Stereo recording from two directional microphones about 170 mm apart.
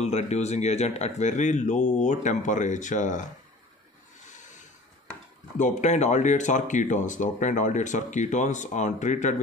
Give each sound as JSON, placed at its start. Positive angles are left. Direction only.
{"t": 0.0, "sound": "speech", "side_deg": 40}
{"t": 4.3, "sound": "a sound", "side_deg": 45}
{"t": 5.6, "sound": "speech", "side_deg": 45}